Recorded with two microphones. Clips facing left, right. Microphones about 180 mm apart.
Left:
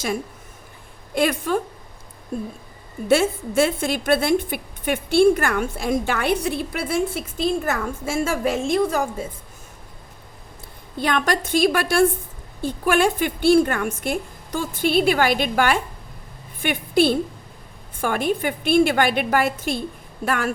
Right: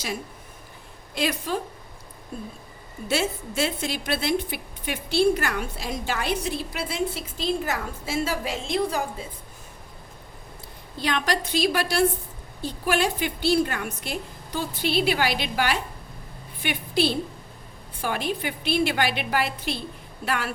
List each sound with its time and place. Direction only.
1.1 s a woman's voice: 55° left (ahead or behind)
3.1 s a woman's voice: 50° left (ahead or behind)
10.9 s a woman's voice: 55° left (ahead or behind)